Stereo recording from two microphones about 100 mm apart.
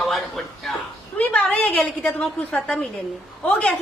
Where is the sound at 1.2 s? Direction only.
15° left (ahead or behind).